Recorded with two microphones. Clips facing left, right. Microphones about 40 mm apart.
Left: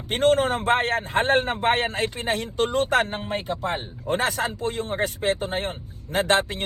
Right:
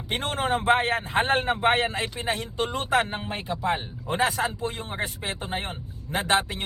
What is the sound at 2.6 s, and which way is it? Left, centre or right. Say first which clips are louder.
Speech: left 3 dB; right.